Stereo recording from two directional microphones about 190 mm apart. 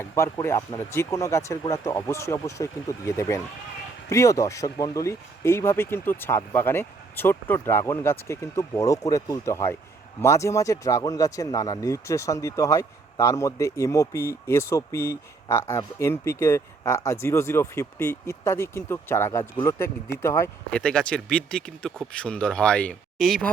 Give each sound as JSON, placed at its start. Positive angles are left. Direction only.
{"t": 0.0, "sound": "speech", "side_deg": 15}